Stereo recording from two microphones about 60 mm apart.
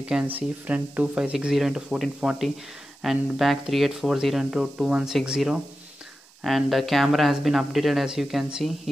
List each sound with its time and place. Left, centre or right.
0.2 s speech: right
1.5 s speech: centre
6.4 s speech: centre